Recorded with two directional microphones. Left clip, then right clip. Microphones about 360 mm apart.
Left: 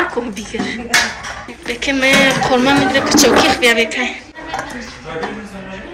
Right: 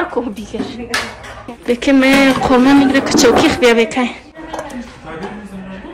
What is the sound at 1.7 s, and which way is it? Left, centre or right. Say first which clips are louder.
Speech: right 2 dB; centre.